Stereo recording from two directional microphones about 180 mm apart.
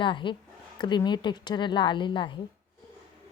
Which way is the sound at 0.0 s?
25° left (ahead or behind).